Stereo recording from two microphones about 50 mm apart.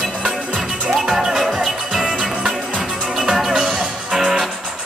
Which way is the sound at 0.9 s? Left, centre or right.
Centre.